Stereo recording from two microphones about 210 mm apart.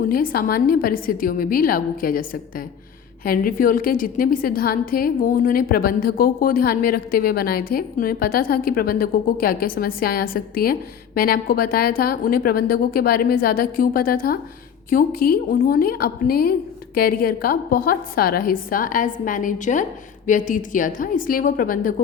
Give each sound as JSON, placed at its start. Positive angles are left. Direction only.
{"t": 0.1, "sound": "a woman's voice", "side_deg": 45}